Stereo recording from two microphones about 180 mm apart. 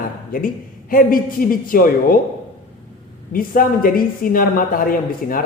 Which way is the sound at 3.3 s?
50° left (ahead or behind).